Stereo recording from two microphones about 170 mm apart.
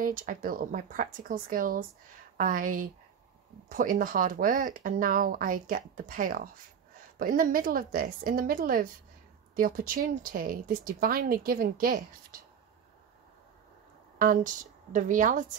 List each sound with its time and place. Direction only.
0.0 s speech: 55° right (ahead or behind)
14.1 s speech: 55° right (ahead or behind)